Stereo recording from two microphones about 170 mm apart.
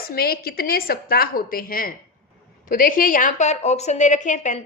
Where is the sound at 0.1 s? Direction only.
65° left (ahead or behind).